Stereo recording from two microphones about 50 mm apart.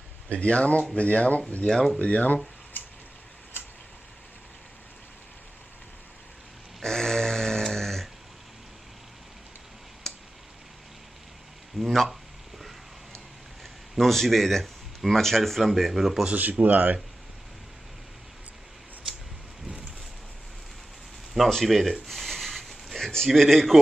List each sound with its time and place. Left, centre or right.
0.3 s speech: left
1.7 s speech: centre
2.0 s speech: left
6.8 s a sound: centre
11.8 s a sound: centre
13.9 s speech: centre
16.3 s speech: right
21.4 s speech: centre
22.0 s a sound: centre
23.1 s speech: centre